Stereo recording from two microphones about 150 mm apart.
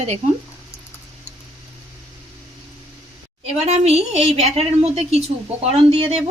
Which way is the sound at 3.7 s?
45° right (ahead or behind).